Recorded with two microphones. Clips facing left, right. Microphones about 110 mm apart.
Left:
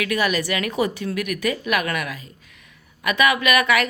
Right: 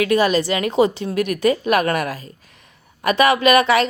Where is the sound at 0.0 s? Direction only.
30° right (ahead or behind).